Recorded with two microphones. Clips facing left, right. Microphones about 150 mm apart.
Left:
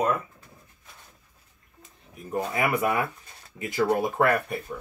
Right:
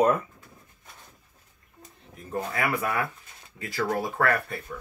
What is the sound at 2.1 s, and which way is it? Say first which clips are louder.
Speech: left 2 dB; 10° left (ahead or behind).